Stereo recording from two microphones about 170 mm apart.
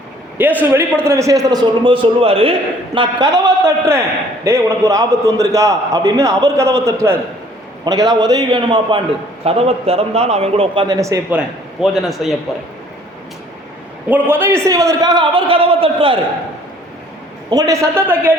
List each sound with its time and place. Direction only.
0.3 s a man's voice: 10° right (ahead or behind); by 10.8 s 35° right (ahead or behind)
10.8 s a man's voice: 20° right (ahead or behind)
11.3 s a man's voice: 5° right (ahead or behind)
14.1 s a man's voice: 10° right (ahead or behind); by 16.1 s 30° right (ahead or behind)
17.5 s a man's voice: 20° right (ahead or behind)